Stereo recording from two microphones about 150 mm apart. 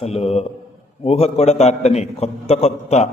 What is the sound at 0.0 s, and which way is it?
A man's voice, 45° left (ahead or behind).